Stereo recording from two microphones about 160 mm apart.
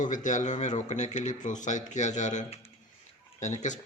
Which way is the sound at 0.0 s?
50° left (ahead or behind).